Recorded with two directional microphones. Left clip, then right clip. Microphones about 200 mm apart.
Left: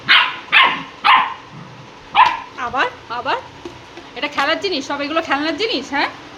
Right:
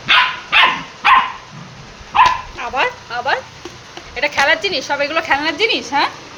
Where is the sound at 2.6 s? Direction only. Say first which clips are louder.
Even; 15° left (ahead or behind).